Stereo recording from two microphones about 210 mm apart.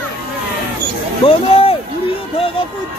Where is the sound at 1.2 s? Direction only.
25° left (ahead or behind).